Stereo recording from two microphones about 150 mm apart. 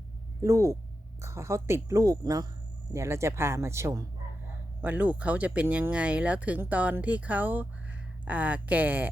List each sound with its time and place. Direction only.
0.4 s a woman's voice: 20° right (ahead or behind)